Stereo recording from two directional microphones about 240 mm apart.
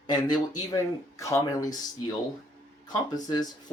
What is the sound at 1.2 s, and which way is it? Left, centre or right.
Speech, centre.